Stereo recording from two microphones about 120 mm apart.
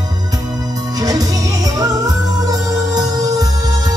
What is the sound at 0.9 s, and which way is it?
Music, 30° right (ahead or behind).